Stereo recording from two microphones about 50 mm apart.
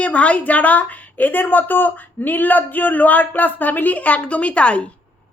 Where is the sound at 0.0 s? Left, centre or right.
Left.